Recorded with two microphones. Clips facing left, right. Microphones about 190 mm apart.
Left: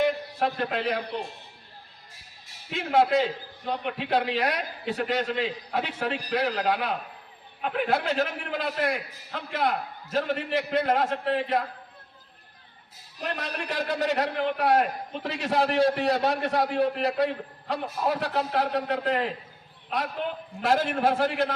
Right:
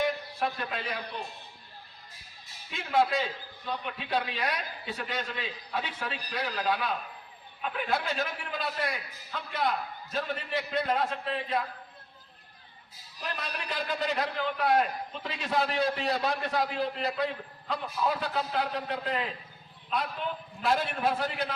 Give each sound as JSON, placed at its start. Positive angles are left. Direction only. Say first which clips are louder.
{"t": 0.0, "sound": "a man's voice", "louder": "left 5 dB", "side_deg": 65}
{"t": 2.9, "sound": "a man's voice", "louder": "left 5 dB", "side_deg": 65}
{"t": 13.2, "sound": "a man's voice", "louder": "left 5 dB", "side_deg": 55}
{"t": 13.7, "sound": "a man's voice", "louder": "left 5 dB", "side_deg": 75}
{"t": 17.7, "sound": "a man's voice", "louder": "left 3 dB", "side_deg": 55}
{"t": 18.2, "sound": "a man's voice", "louder": "left 4 dB", "side_deg": 70}